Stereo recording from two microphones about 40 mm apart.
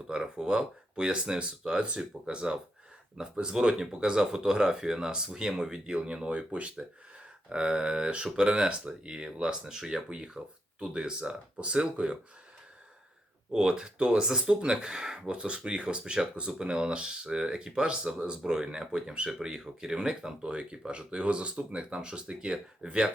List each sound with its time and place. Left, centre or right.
0.2 s speech: right
3.2 s speech: centre
13.5 s speech: centre